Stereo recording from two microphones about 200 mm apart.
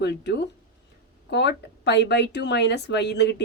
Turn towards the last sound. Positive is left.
turn(degrees=60)  # may be behind; listen again after turning